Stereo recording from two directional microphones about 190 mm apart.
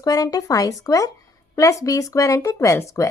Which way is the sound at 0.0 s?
20° left (ahead or behind).